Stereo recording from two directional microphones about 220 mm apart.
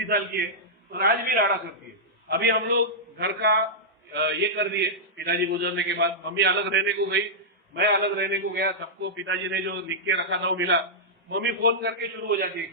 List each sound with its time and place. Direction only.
0.9 s a man's voice: 45° right (ahead or behind)